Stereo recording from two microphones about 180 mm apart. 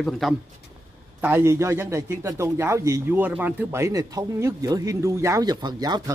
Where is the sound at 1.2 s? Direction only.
10° right (ahead or behind).